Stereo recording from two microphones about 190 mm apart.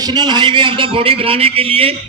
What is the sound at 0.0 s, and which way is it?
A man's voice, 20° right (ahead or behind).